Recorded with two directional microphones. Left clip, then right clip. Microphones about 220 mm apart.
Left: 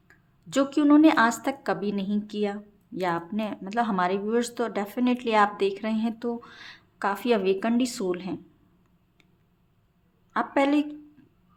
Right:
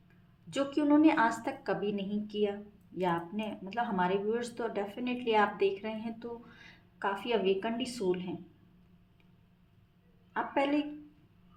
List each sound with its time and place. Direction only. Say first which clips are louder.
0.5 s speech: left 7 dB; 50° left (ahead or behind)
10.3 s speech: left 7 dB; 45° left (ahead or behind)